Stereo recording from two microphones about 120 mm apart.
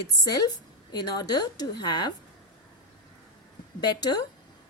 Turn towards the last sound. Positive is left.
turn(degrees=35)  # may be behind; listen again after turning